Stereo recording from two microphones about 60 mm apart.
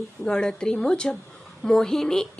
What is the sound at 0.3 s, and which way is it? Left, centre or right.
A woman's voice, centre.